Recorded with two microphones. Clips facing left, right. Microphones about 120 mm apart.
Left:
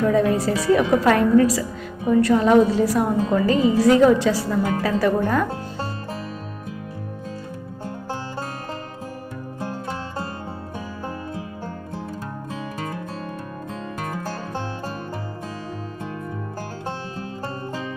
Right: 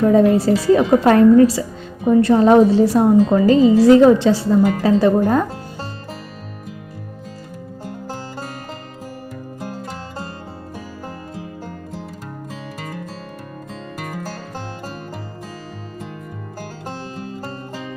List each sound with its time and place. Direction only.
0.0 s a woman's voice: 30° right (ahead or behind)